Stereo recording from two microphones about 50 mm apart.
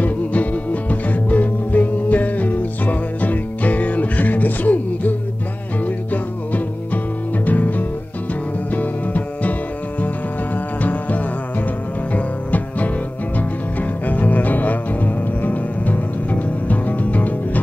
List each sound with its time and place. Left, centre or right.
0.0 s music: left
7.4 s music: left
12.4 s music: left
14.0 s music: left